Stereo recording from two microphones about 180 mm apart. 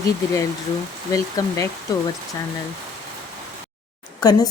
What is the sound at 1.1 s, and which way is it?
Speech, 15° left (ahead or behind).